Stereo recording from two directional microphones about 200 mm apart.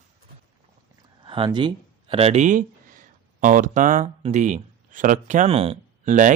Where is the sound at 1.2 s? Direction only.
25° right (ahead or behind).